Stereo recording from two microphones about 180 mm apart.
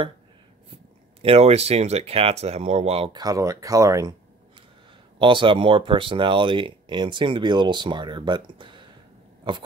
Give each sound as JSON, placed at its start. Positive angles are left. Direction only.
{"t": 1.2, "sound": "speech", "side_deg": -35}
{"t": 5.2, "sound": "speech", "side_deg": -25}